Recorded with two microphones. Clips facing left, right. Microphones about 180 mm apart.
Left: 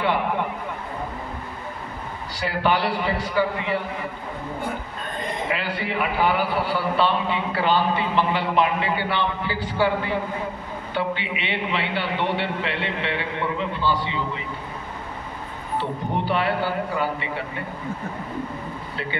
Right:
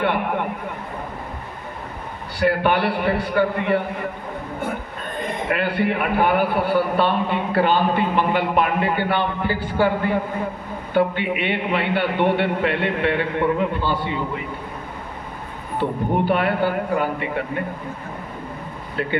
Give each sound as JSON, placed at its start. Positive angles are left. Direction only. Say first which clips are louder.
{"t": 0.0, "sound": "a sound", "louder": "right 1 dB", "side_deg": -55}
{"t": 2.4, "sound": "a man's voice", "louder": "right 4 dB", "side_deg": -55}
{"t": 5.5, "sound": "a man's voice", "louder": "right 9 dB", "side_deg": -55}
{"t": 15.8, "sound": "a man's voice", "louder": "right 7 dB", "side_deg": -50}